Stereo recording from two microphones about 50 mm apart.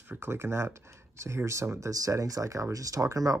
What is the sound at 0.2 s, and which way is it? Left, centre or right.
Speech, right.